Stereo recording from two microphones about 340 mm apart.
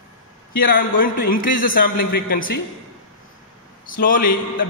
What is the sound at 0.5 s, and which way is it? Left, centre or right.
A man's voice, left.